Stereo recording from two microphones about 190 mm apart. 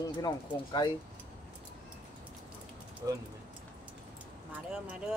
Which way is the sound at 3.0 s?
15° right (ahead or behind).